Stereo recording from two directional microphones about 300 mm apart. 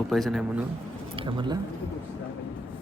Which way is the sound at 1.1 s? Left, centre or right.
Centre.